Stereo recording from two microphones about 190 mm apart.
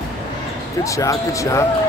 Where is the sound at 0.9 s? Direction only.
15° left (ahead or behind).